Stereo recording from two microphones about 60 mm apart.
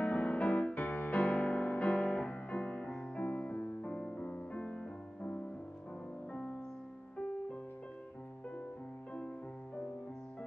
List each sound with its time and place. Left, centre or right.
0.0 s music: left
0.8 s music: left; by 5.4 s centre